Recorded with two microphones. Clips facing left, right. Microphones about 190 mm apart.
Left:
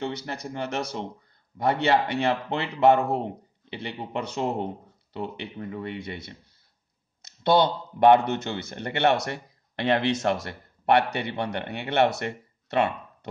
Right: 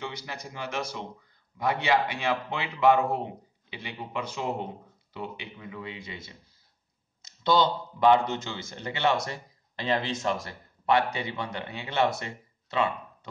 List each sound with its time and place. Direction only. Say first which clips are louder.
0.0 s speech: left 6 dB; 60° left (ahead or behind)